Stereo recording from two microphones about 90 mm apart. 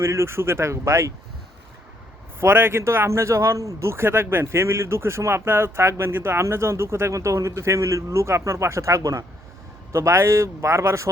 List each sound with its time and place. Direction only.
0.0 s speech: 30° right (ahead or behind)
2.4 s speech: 25° right (ahead or behind)